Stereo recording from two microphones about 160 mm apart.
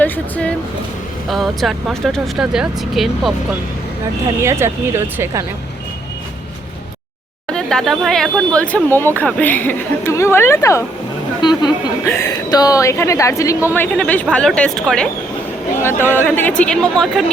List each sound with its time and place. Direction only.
0.0 s speech: 10° left (ahead or behind)
4.4 s speech: 15° right (ahead or behind)
7.5 s speech: 5° left (ahead or behind)
11.4 s a woman's voice: 25° left (ahead or behind)
12.0 s a woman's voice: 15° left (ahead or behind)
13.7 s speech: 5° left (ahead or behind)